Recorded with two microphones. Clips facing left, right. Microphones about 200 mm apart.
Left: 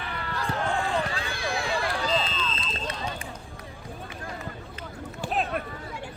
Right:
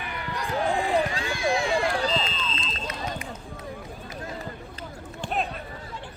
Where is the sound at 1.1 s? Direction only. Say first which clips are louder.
Right 3 dB; 35° left (ahead or behind).